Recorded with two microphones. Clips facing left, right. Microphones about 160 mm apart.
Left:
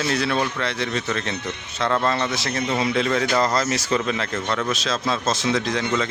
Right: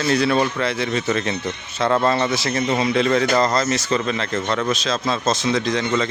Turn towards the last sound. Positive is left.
turn(degrees=5)  # may be behind; listen again after turning